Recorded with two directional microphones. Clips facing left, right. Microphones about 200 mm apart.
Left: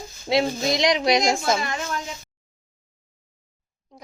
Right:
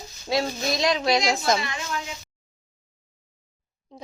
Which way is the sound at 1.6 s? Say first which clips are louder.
Left 3 dB; 45° left (ahead or behind).